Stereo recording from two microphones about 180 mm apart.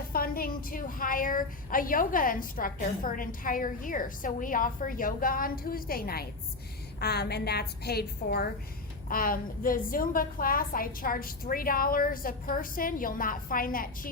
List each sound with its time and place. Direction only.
0.1 s a woman's voice: 55° left (ahead or behind)